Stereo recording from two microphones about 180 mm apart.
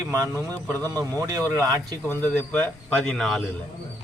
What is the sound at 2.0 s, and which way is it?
Speech, 10° left (ahead or behind).